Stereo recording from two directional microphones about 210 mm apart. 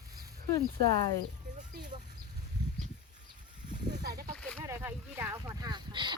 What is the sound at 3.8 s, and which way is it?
Speech, 50° right (ahead or behind).